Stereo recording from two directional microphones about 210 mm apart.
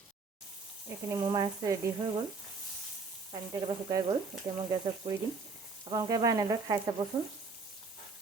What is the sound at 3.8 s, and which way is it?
Speech, 15° right (ahead or behind).